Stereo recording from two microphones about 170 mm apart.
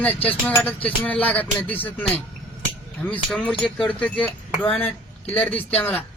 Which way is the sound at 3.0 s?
5° left (ahead or behind).